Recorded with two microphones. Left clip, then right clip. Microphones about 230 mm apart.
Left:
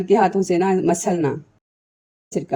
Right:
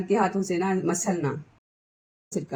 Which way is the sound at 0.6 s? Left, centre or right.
Left.